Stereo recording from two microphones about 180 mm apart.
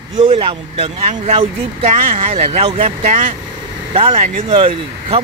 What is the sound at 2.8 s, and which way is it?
Speech, 45° right (ahead or behind).